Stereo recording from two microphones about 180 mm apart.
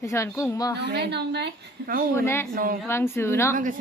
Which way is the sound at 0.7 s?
70° right (ahead or behind).